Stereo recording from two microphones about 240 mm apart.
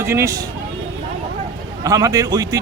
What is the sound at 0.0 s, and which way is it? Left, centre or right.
Speech, centre.